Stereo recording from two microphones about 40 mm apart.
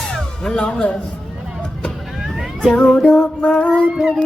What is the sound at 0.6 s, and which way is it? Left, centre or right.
Speech, left.